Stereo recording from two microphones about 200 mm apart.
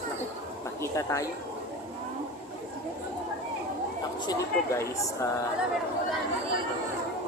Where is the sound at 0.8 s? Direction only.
15° left (ahead or behind).